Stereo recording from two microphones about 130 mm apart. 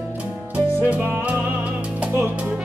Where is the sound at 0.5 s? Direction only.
15° right (ahead or behind).